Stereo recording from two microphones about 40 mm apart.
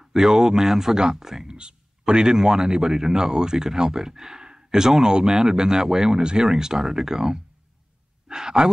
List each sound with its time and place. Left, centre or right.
0.0 s a man's voice: centre